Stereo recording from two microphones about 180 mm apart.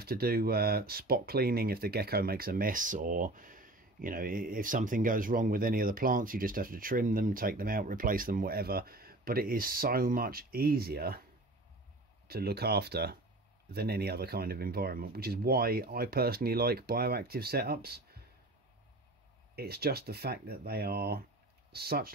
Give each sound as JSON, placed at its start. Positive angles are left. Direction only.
{"t": 0.0, "sound": "speech", "side_deg": -55}
{"t": 12.3, "sound": "speech", "side_deg": -60}
{"t": 19.5, "sound": "speech", "side_deg": -60}